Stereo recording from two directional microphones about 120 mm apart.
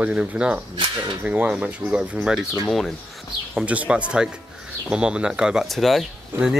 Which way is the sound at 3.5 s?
10° right (ahead or behind).